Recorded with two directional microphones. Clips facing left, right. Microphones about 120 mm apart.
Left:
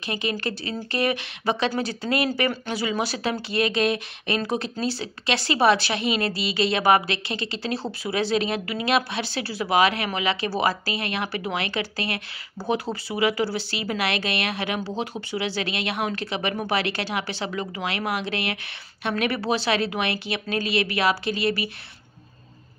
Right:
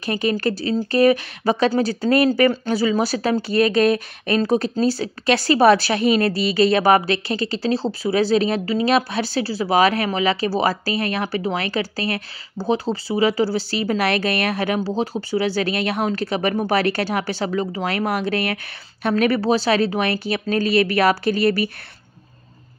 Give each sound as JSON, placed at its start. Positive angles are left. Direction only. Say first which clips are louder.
{"t": 0.0, "sound": "speech", "louder": "right 7 dB", "side_deg": -40}